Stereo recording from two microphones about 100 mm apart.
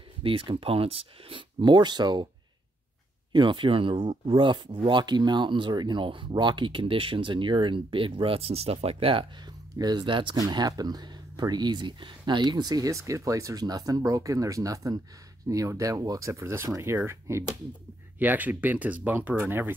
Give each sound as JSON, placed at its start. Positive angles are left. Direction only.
{"t": 0.2, "sound": "speech", "side_deg": -60}
{"t": 1.6, "sound": "speech", "side_deg": -50}
{"t": 3.3, "sound": "speech", "side_deg": -55}
{"t": 9.8, "sound": "speech", "side_deg": -40}
{"t": 10.0, "sound": "speech", "side_deg": -55}
{"t": 10.3, "sound": "speech", "side_deg": -40}
{"t": 18.2, "sound": "speech", "side_deg": -15}